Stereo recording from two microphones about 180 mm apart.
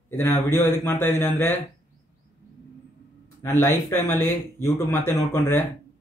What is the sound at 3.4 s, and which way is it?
Speech, 15° left (ahead or behind).